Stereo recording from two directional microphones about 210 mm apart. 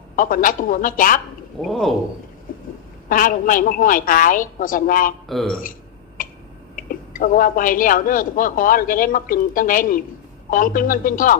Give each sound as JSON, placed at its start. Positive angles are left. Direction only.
{"t": 0.2, "sound": "a man's voice", "side_deg": 40}
{"t": 1.6, "sound": "speech", "side_deg": 0}
{"t": 3.1, "sound": "a man's voice", "side_deg": 40}
{"t": 5.3, "sound": "speech", "side_deg": 0}
{"t": 6.2, "sound": "tick-tock", "side_deg": 40}
{"t": 6.7, "sound": "a man's voice", "side_deg": 40}